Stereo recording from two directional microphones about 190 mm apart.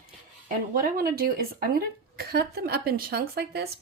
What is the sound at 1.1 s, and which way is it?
A woman's voice, 50° right (ahead or behind).